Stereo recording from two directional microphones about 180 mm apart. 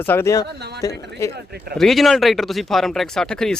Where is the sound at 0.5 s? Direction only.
65° right (ahead or behind).